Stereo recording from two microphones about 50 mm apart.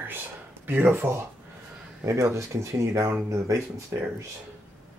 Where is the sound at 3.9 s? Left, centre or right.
Right.